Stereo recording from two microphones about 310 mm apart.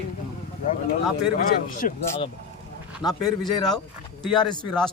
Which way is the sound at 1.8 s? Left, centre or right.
Centre.